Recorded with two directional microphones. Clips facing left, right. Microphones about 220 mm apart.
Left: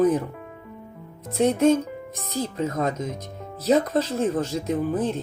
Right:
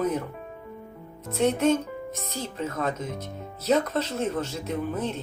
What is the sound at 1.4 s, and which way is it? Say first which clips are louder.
Speech: left 3 dB; 35° left (ahead or behind).